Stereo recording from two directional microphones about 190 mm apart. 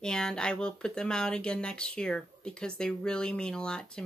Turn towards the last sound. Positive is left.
turn(degrees=5)  # may be behind; listen again after turning